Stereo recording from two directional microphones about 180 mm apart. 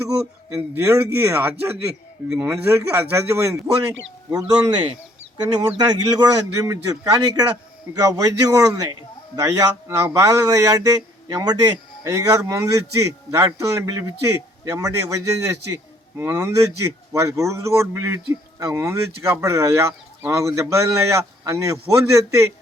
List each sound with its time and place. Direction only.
0.5 s a man's voice: 10° right (ahead or behind)